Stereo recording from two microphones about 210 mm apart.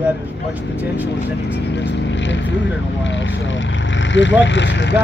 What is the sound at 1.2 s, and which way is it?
Speech, 55° left (ahead or behind).